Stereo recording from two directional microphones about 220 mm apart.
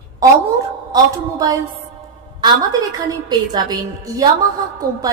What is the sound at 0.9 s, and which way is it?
Speech, 15° right (ahead or behind).